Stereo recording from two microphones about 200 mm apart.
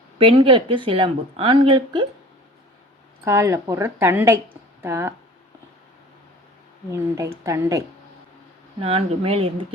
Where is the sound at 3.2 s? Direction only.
15° right (ahead or behind).